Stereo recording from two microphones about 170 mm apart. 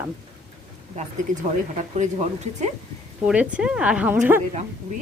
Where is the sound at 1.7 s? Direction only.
45° right (ahead or behind).